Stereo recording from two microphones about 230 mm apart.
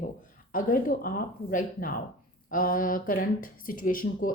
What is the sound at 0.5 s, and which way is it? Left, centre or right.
Speech, left.